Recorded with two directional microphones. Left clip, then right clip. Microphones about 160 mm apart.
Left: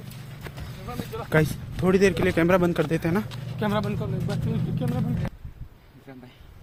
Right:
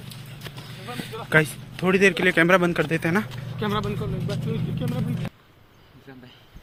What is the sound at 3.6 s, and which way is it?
Speech, 90° left.